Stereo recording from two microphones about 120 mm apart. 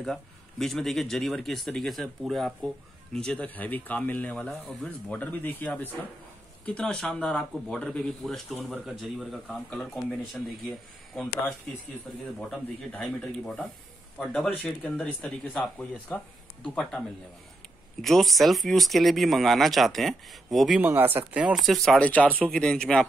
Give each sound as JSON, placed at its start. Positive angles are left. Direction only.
{"t": 0.0, "sound": "speech", "side_deg": 5}
{"t": 12.4, "sound": "speech", "side_deg": 5}
{"t": 18.0, "sound": "speech", "side_deg": 0}
{"t": 20.8, "sound": "speech", "side_deg": -15}
{"t": 21.6, "sound": "speech", "side_deg": 0}